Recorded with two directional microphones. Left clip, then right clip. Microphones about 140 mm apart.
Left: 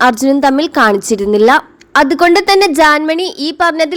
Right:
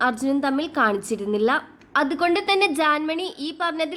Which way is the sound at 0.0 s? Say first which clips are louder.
Left 13 dB; 50° left (ahead or behind).